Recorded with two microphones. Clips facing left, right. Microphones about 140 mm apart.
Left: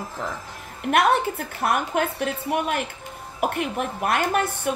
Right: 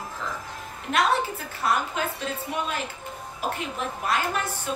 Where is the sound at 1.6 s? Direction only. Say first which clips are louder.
Left 3 dB; 60° left (ahead or behind).